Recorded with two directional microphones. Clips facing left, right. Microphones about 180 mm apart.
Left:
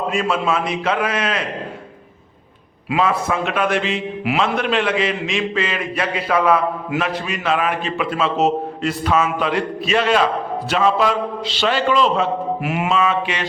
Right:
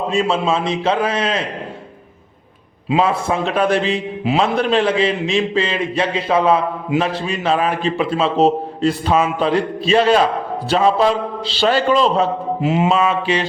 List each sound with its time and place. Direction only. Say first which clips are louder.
0.1 s a man's voice: right 3 dB; 25° right (ahead or behind)
2.9 s a man's voice: right 2 dB; 30° right (ahead or behind)
12.6 s a man's voice: right 10 dB; 25° right (ahead or behind)
12.9 s a man's voice: right 2 dB; 35° right (ahead or behind)